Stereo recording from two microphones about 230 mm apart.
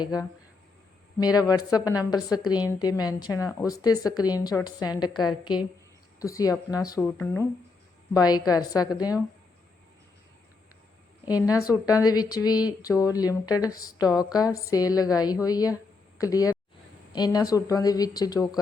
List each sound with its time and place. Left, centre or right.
0.0 s a woman's voice: centre
11.7 s a woman's voice: centre